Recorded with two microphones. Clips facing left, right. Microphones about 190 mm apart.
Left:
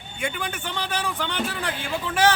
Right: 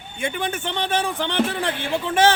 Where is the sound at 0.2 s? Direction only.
25° right (ahead or behind).